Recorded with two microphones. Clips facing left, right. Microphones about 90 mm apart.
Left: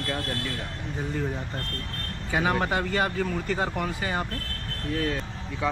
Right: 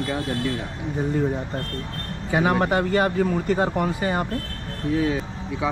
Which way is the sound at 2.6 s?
40° right (ahead or behind).